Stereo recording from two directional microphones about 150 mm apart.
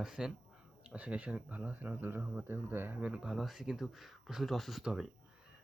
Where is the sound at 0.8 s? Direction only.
10° right (ahead or behind).